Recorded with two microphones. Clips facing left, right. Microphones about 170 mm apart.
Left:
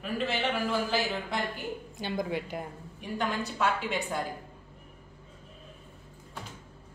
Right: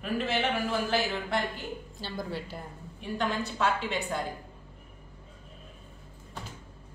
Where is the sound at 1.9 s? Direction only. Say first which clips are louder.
Left 5 dB; 15° left (ahead or behind).